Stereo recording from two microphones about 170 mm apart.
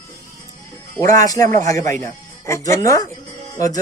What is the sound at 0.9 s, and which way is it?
A man's voice, 20° left (ahead or behind).